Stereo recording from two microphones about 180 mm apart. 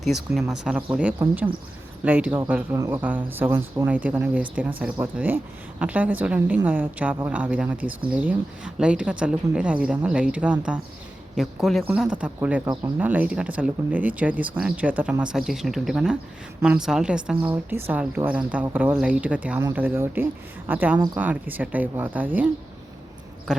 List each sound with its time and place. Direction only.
0.3 s speech: 5° right (ahead or behind)
2.7 s speech: 20° right (ahead or behind)
12.6 s speech: 20° right (ahead or behind)
13.0 s speech: 10° right (ahead or behind)
23.5 s speech: 5° right (ahead or behind)